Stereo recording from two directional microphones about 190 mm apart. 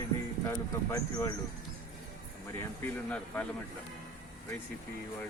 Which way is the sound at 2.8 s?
5° left (ahead or behind).